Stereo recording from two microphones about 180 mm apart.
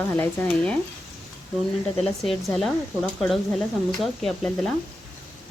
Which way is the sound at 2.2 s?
Centre (ahead or behind).